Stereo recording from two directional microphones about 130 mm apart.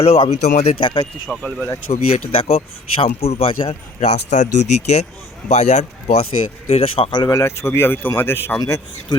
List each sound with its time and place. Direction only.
0.0 s speech: 50° left (ahead or behind)
1.3 s speech: centre (ahead or behind)
1.9 s speech: 50° left (ahead or behind)
6.7 s speech: 50° left (ahead or behind)
7.3 s speech: 20° left (ahead or behind)
8.5 s speech: 30° left (ahead or behind)